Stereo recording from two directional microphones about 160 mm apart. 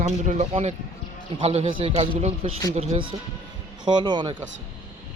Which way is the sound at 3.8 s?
30° right (ahead or behind).